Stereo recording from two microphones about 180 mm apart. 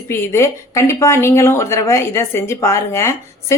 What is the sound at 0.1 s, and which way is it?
Speech, 15° left (ahead or behind).